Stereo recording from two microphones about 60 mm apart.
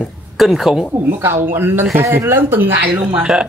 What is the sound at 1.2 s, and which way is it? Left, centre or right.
Speech, right.